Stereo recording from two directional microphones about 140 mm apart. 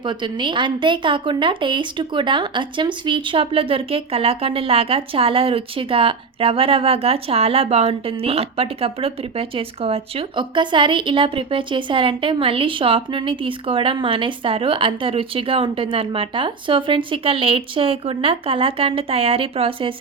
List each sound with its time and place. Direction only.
0.0 s a woman's voice: 35° right (ahead or behind)